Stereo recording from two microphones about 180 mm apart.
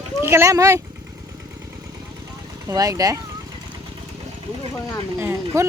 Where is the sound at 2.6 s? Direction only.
20° right (ahead or behind).